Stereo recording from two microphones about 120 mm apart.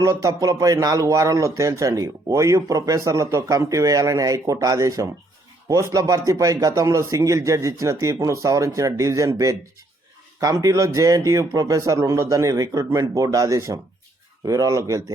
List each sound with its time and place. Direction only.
0.0 s speech: 25° right (ahead or behind)